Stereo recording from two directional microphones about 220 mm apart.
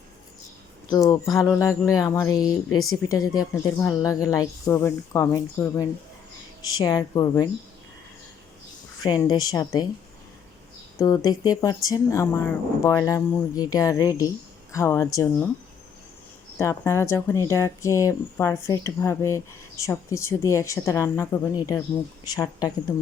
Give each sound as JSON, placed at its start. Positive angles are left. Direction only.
{"t": 0.9, "sound": "speech", "side_deg": 15}
{"t": 2.7, "sound": "speech", "side_deg": 70}
{"t": 3.1, "sound": "speech", "side_deg": 15}
{"t": 9.0, "sound": "speech", "side_deg": 20}
{"t": 10.9, "sound": "speech", "side_deg": 15}
{"t": 16.6, "sound": "speech", "side_deg": 10}